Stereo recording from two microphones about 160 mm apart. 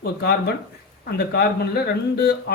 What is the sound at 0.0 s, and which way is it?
A man's voice, 85° left.